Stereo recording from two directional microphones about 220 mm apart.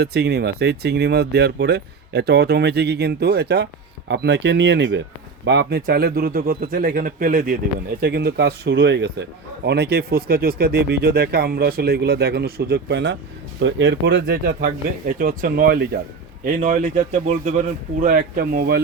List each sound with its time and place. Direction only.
0.0 s speech: 45° right (ahead or behind)